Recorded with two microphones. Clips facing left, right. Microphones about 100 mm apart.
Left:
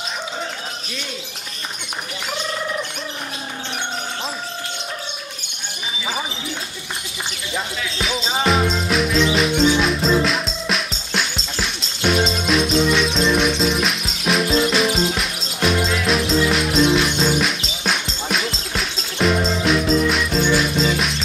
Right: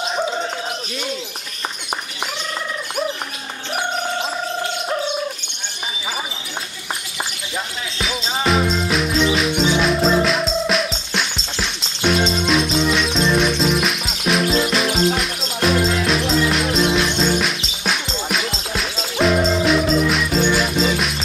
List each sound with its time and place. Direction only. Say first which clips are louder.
7.5 s music: left 1 dB; centre (ahead or behind)